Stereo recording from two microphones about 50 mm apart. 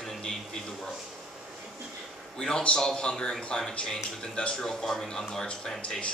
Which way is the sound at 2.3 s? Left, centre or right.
Centre.